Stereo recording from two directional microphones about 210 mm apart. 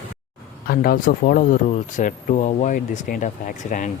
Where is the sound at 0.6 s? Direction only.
45° left (ahead or behind).